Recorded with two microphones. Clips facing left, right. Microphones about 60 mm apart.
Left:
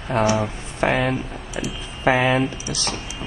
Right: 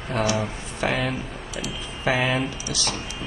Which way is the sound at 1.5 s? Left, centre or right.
Left.